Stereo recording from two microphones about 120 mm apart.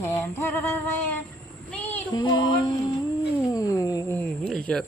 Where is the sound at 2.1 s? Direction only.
40° left (ahead or behind).